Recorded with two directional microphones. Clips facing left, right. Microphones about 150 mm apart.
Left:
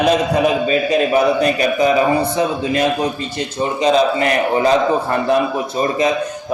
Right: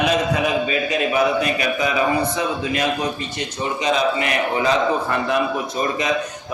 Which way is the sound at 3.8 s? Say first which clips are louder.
Left 6 dB; 35° left (ahead or behind).